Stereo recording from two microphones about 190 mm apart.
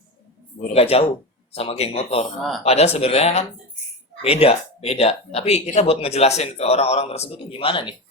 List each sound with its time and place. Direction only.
0.7 s speech: 30° left (ahead or behind)